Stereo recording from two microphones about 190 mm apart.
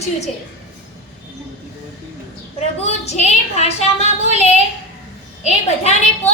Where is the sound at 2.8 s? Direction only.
35° left (ahead or behind).